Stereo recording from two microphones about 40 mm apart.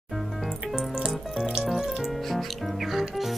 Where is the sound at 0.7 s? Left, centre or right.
Right.